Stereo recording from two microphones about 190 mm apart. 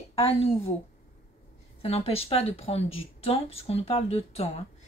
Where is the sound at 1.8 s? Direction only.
30° left (ahead or behind).